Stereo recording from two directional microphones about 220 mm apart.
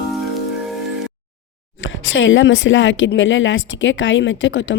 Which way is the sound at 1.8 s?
60° left (ahead or behind).